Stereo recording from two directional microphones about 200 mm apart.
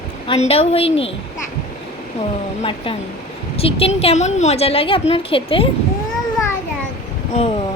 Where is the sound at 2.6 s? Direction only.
25° left (ahead or behind).